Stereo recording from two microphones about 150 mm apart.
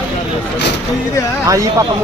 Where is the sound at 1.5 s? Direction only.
20° right (ahead or behind).